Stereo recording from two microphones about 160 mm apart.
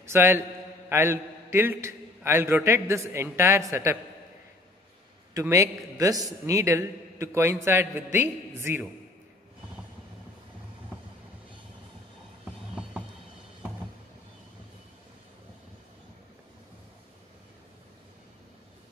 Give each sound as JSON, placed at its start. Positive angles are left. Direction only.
{"t": 0.0, "sound": "a man's voice", "side_deg": -15}
{"t": 5.3, "sound": "a man's voice", "side_deg": -20}